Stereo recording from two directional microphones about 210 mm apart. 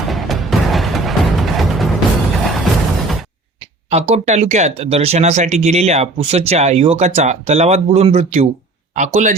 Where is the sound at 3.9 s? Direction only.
30° right (ahead or behind).